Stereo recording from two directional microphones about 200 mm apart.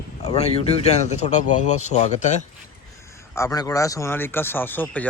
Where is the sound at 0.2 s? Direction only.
30° left (ahead or behind).